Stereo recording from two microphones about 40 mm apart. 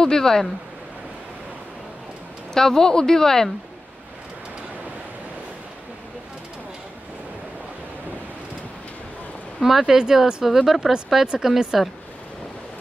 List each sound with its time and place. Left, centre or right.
0.0 s speech: centre
2.5 s speech: centre
9.6 s speech: centre